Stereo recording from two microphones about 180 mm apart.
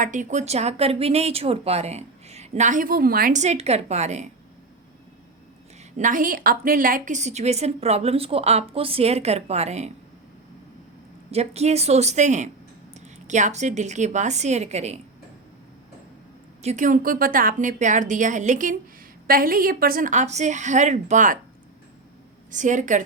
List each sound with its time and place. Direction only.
0.0 s speech: 45° right (ahead or behind)
6.0 s speech: 50° right (ahead or behind)
11.3 s a woman's voice: 35° right (ahead or behind)
16.6 s a woman's voice: 45° right (ahead or behind)
22.5 s a woman's voice: 45° right (ahead or behind)